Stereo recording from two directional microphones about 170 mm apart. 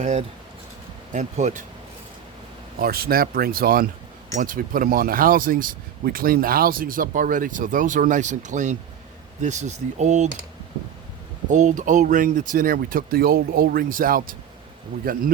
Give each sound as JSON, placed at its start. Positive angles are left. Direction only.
{"t": 0.0, "sound": "speech", "side_deg": -40}
{"t": 2.7, "sound": "speech", "side_deg": -60}
{"t": 11.4, "sound": "speech", "side_deg": -45}